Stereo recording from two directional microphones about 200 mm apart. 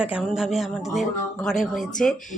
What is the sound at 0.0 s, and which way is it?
Speech, 5° right (ahead or behind).